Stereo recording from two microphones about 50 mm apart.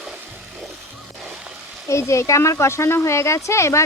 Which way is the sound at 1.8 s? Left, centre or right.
Left.